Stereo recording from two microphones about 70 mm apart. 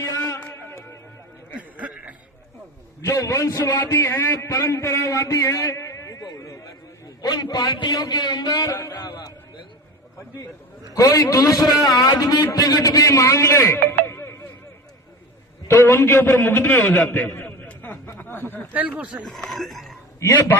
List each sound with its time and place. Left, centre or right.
0.3 s music: left
1.5 s a sound: right
3.0 s a man's voice: left
3.7 s a man's voice: left
5.3 s a sound: left
7.2 s a man's voice: left
9.0 s a man's voice: left
10.9 s a man's voice: left
13.8 s music: left
15.6 s a man's voice: left
17.3 s a sound: left
18.7 s speech: right
19.2 s speech: centre
20.1 s a man's voice: left